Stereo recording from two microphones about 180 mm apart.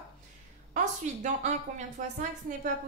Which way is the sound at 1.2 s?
40° right (ahead or behind).